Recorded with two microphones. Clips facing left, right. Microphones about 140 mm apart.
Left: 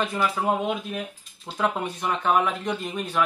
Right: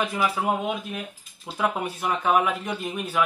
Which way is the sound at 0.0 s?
5° right (ahead or behind).